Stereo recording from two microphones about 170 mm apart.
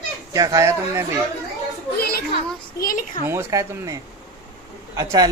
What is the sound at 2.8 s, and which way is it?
Speech, 55° left (ahead or behind).